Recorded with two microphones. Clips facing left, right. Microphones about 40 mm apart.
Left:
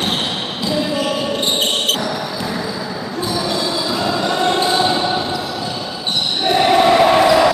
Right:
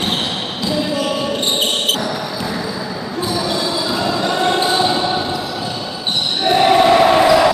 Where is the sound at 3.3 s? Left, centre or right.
Centre.